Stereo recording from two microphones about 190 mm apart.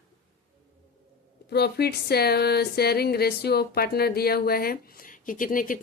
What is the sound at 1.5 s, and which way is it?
Speech, 60° left (ahead or behind).